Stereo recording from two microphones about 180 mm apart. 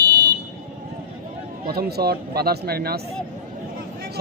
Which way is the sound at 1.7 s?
60° right (ahead or behind).